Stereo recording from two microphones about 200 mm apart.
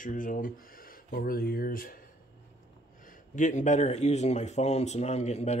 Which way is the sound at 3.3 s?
35° left (ahead or behind).